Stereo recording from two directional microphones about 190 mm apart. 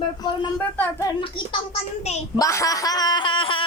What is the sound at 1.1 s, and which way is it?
Speech, 25° left (ahead or behind).